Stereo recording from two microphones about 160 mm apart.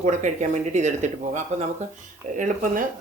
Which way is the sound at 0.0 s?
50° right (ahead or behind).